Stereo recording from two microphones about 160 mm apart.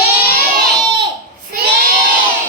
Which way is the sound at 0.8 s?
30° right (ahead or behind).